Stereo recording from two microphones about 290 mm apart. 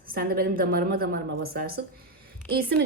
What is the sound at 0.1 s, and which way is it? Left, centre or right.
A woman's voice, right.